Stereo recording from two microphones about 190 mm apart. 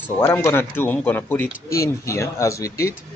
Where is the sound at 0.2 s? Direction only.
10° left (ahead or behind).